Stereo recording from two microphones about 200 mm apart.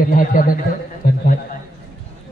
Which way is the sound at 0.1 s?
45° left (ahead or behind).